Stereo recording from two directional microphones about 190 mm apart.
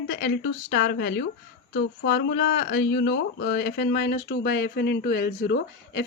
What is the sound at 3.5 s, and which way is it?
Speech, 55° left (ahead or behind).